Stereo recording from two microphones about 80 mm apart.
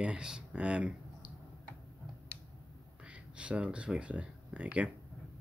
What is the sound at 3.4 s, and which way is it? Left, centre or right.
Speech, centre.